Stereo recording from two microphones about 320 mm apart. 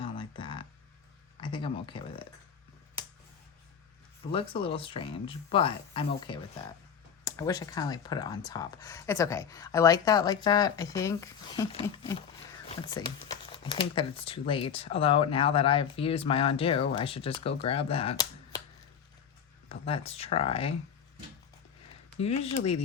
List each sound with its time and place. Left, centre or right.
0.0 s a sound: centre
1.4 s speech: centre
4.3 s speech: centre
19.6 s speech: centre
22.2 s speech: centre